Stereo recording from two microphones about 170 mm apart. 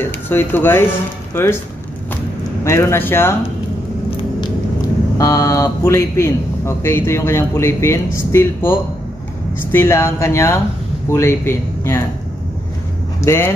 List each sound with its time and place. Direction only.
0.0 s speech: 10° left (ahead or behind)
2.6 s speech: 15° left (ahead or behind)
4.4 s speech: 20° left (ahead or behind)
13.2 s speech: 15° left (ahead or behind)